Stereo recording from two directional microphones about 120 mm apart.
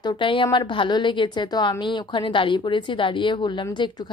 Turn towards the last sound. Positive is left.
turn(degrees=40)  # may be behind; listen again after turning